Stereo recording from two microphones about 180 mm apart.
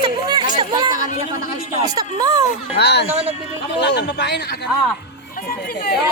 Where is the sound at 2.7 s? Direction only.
65° left (ahead or behind).